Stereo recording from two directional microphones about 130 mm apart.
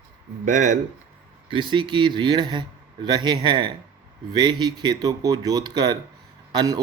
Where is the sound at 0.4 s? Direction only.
70° right (ahead or behind).